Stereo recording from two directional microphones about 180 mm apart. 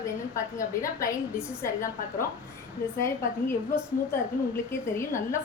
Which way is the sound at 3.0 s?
15° left (ahead or behind).